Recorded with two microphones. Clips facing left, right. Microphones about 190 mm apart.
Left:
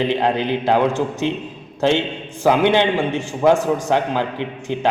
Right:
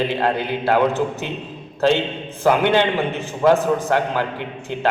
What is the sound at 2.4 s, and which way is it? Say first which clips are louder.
A man's voice: left 1 dB; 15° left (ahead or behind).